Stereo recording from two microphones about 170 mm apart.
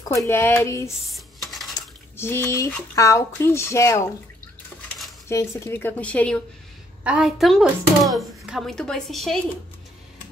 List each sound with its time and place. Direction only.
0.1 s speech: 15° left (ahead or behind)
1.0 s a sound: centre (ahead or behind)
2.1 s speech: 15° left (ahead or behind)
5.3 s speech: 15° left (ahead or behind)
7.0 s speech: 5° right (ahead or behind)